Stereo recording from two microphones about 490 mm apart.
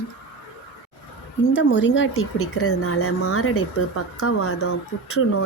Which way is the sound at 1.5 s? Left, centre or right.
Left.